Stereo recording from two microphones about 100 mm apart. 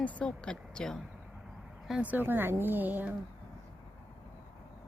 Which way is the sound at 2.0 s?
20° right (ahead or behind).